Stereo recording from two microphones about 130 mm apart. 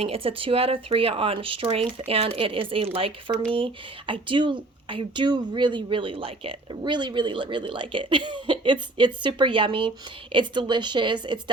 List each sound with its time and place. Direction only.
0.0 s speech: 45° right (ahead or behind)